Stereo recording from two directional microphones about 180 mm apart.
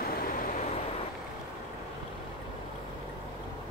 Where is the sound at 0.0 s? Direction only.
55° left (ahead or behind).